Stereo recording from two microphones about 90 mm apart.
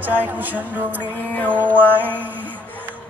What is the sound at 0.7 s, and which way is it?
Music, 20° right (ahead or behind).